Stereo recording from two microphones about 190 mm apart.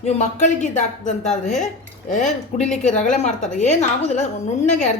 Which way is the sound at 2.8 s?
40° left (ahead or behind).